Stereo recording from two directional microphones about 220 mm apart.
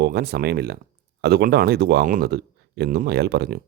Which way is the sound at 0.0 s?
50° right (ahead or behind).